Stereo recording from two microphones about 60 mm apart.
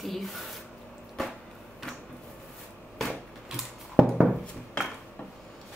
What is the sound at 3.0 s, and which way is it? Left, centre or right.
Typewriter, centre.